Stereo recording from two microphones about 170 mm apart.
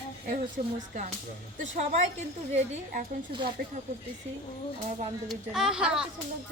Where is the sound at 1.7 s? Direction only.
45° right (ahead or behind); by 3.7 s 60° right (ahead or behind).